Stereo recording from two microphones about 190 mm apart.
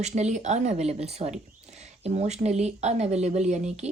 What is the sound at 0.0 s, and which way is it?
Speech, 35° right (ahead or behind).